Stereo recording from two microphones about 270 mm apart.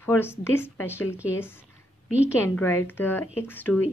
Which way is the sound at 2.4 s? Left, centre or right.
Centre.